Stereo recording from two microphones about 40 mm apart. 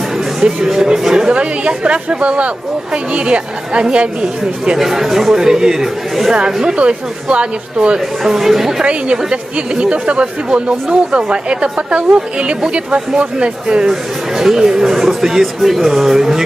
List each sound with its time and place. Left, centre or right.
0.3 s speech: centre
1.4 s speech: right
4.8 s speech: centre
6.7 s speech: right
7.9 s speech: centre
8.8 s speech: right
14.3 s speech: centre